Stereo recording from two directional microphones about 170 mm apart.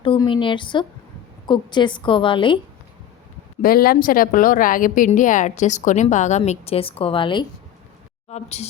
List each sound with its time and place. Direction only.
0.0 s a woman's voice: 30° left (ahead or behind)
3.6 s a woman's voice: 60° left (ahead or behind); by 7.4 s 30° left (ahead or behind)
8.3 s speech: 40° left (ahead or behind)